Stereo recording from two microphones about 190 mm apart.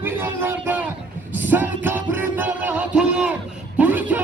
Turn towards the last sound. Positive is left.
turn(degrees=-10)  # may be behind; listen again after turning